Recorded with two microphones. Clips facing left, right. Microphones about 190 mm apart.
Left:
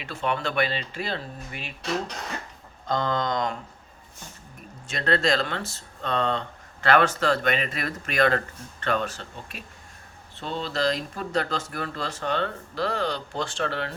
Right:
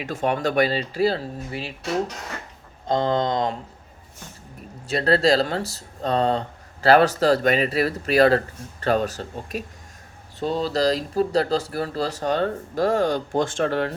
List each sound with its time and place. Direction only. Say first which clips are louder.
0.0 s speech: right 5 dB; 45° right (ahead or behind)
2.8 s speech: right 5 dB; 25° right (ahead or behind)
4.9 s speech: right 5 dB; 35° right (ahead or behind)